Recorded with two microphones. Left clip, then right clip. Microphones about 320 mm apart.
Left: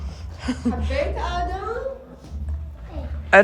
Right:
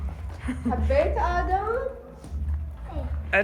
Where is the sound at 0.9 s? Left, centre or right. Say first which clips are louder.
Right 4 dB; right.